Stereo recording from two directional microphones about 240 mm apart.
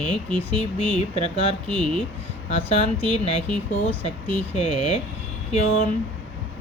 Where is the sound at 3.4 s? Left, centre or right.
Centre.